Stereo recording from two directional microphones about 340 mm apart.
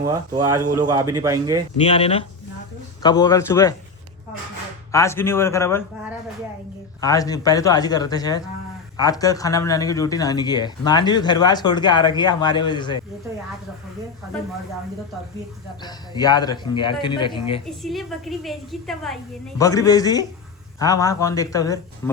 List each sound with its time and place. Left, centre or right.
0.1 s a man's voice: centre
1.8 s speech: centre
4.9 s speech: centre
7.0 s speech: centre
15.8 s speech: centre
17.7 s a woman's voice: centre